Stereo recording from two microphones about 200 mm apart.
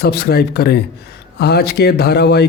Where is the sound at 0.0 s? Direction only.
55° left (ahead or behind).